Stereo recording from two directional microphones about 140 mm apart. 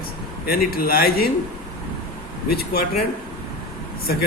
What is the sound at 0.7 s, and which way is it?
Speech, 90° left.